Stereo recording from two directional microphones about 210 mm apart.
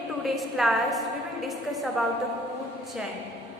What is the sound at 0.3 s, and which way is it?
A woman's voice, centre (ahead or behind).